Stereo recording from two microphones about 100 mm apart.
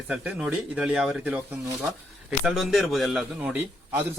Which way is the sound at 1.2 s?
15° right (ahead or behind).